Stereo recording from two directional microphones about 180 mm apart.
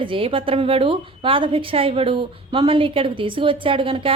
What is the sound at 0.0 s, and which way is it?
A woman's voice, 30° right (ahead or behind).